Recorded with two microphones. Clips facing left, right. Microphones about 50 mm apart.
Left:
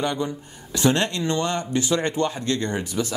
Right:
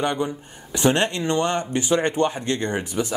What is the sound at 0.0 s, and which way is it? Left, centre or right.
Speech, right.